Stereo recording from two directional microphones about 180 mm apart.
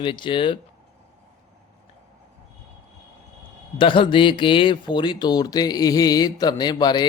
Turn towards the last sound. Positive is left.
turn(degrees=25)  # may be behind; listen again after turning